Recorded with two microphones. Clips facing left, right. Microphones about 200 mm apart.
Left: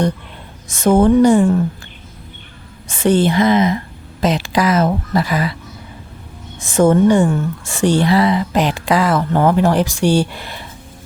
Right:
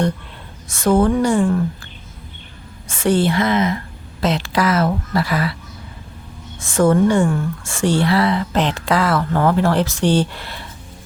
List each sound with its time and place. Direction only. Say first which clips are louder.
0.7 s a woman's voice: left 4 dB; 20° left (ahead or behind)
2.9 s a woman's voice: left 3 dB; 20° left (ahead or behind)
6.6 s speech: left 2 dB; 20° left (ahead or behind)